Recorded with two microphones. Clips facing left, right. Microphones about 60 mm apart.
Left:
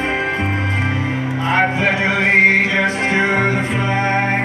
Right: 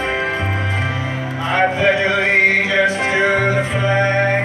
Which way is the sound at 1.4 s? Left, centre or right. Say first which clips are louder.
Right 2 dB; centre.